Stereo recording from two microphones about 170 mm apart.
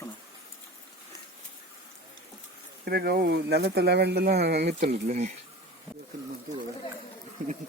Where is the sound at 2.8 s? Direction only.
65° right (ahead or behind).